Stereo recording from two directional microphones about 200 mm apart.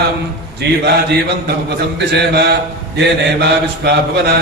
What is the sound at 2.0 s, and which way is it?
Mantra, 55° right (ahead or behind).